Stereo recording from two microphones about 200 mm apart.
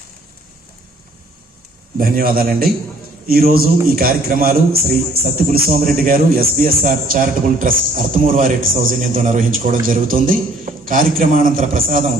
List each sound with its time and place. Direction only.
2.0 s a man's voice: 45° right (ahead or behind)